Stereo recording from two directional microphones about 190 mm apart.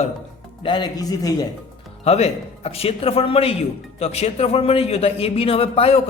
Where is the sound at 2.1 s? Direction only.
35° left (ahead or behind).